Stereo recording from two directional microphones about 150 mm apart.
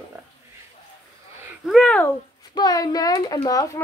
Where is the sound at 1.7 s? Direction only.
5° left (ahead or behind).